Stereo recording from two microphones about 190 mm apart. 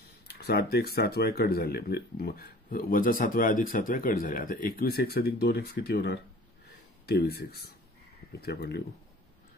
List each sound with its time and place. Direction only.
0.3 s speech: 55° left (ahead or behind)